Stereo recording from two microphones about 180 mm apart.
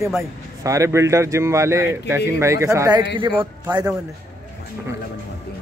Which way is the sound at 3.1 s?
30° right (ahead or behind).